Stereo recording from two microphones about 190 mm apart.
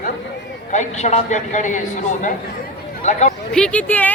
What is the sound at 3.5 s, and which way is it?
Speech, 5° left (ahead or behind).